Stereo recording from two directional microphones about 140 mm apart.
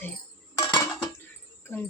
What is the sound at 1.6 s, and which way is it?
Speech, 15° left (ahead or behind).